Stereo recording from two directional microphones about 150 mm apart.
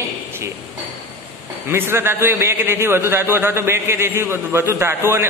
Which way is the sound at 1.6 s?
15° right (ahead or behind).